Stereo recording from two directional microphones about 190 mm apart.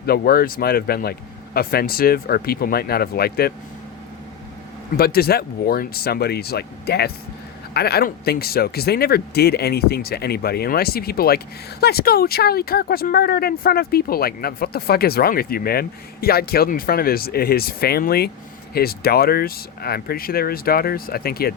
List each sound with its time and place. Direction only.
0.0 s speech: 55° left (ahead or behind)
4.9 s speech: 55° left (ahead or behind)